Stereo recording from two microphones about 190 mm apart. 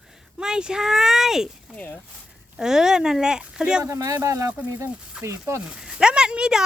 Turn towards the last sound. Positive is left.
turn(degrees=-5)  # may be behind; listen again after turning